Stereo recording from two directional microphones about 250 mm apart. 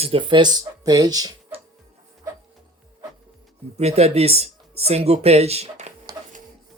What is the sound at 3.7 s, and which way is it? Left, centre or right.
Speech, right.